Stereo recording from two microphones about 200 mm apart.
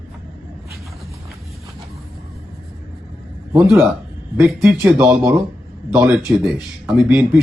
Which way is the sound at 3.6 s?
5° right (ahead or behind).